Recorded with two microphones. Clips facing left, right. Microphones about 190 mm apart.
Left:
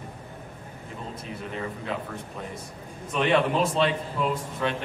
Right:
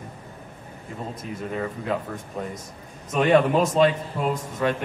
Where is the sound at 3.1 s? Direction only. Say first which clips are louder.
Right 4 dB; 45° right (ahead or behind).